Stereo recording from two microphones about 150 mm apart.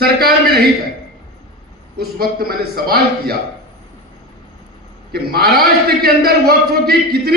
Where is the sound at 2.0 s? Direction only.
90° right.